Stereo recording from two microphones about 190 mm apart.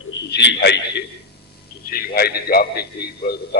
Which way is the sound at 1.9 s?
55° left (ahead or behind).